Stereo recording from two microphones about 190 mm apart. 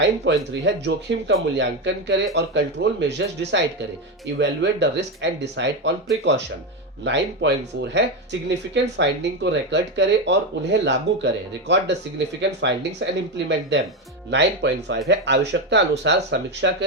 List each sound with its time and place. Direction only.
0.0 s speech: 70° right (ahead or behind)
7.0 s speech: 65° right (ahead or behind)
12.4 s speech: 70° right (ahead or behind)